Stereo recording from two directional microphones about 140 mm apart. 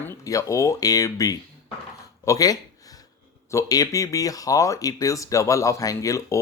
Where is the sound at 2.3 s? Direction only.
25° left (ahead or behind).